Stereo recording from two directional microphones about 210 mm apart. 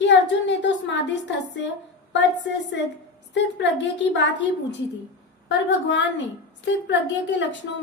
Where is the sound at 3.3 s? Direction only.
60° left (ahead or behind).